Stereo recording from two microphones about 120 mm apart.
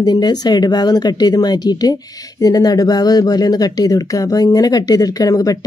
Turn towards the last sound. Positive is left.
turn(degrees=30)  # may be behind; listen again after turning